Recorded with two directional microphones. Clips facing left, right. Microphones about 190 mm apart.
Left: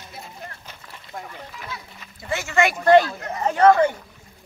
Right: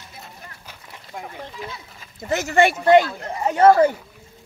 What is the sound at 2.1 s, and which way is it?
Speech, 40° right (ahead or behind).